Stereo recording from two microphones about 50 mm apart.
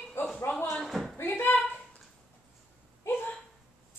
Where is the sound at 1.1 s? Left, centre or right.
Left.